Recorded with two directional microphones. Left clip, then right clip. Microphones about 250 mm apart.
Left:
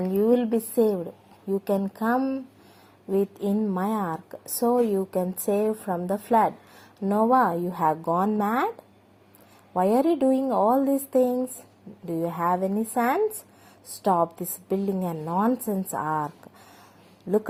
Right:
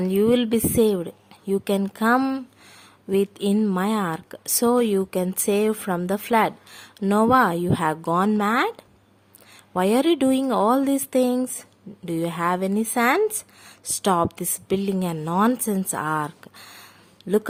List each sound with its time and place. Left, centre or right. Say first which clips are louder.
0.0 s a woman's voice: right 2 dB; right
1.0 s a sound: right 3 dB; right
2.0 s a woman's voice: right 6 dB; right
6.7 s speech: right 5 dB; right
7.3 s a woman's voice: right 2 dB; right